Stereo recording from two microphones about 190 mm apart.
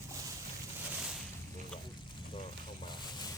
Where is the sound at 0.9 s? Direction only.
5° right (ahead or behind).